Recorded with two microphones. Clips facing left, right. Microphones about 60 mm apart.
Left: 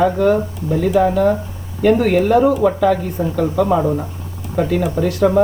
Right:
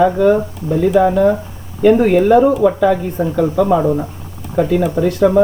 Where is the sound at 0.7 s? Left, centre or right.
Right.